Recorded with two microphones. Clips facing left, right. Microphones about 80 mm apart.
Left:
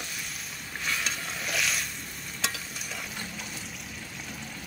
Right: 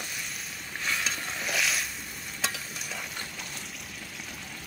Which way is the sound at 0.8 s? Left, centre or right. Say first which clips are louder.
Right 1 dB; centre.